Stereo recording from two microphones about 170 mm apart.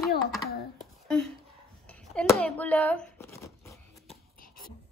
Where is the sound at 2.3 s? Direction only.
10° left (ahead or behind).